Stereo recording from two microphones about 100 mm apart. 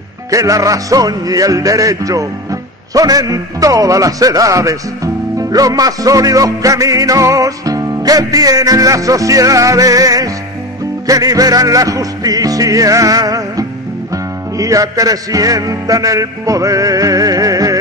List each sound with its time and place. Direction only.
0.3 s a man's voice: 35° right (ahead or behind)
14.1 s music: 35° right (ahead or behind)